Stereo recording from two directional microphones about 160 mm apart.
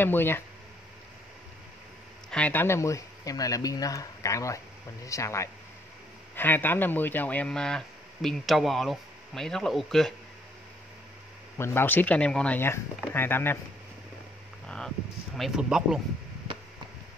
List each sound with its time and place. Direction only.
0.0 s speech: 15° left (ahead or behind)
2.3 s speech: 10° left (ahead or behind)
11.5 s speech: 15° left (ahead or behind)
15.3 s speech: centre (ahead or behind)